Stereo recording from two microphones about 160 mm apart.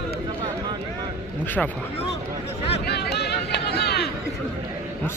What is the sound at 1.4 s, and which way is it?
Speech, 10° left (ahead or behind).